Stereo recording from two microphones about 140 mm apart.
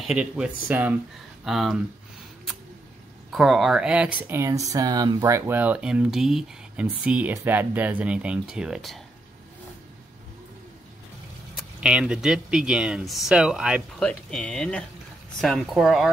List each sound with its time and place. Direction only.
0.0 s speech: 5° right (ahead or behind)
1.4 s speech: centre (ahead or behind)
3.3 s speech: centre (ahead or behind)
11.5 s speech: 5° right (ahead or behind)
13.9 s speech: 5° left (ahead or behind)